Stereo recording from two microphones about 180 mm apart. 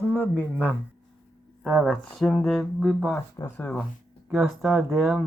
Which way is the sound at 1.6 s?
5° right (ahead or behind).